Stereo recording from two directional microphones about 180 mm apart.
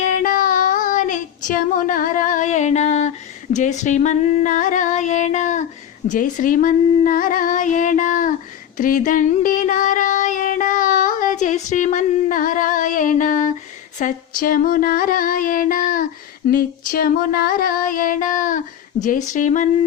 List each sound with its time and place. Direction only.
0.0 s child singing: 45° left (ahead or behind)
3.5 s female singing: 40° left (ahead or behind)
8.8 s a sound: 45° left (ahead or behind)
14.0 s female singing: 50° left (ahead or behind)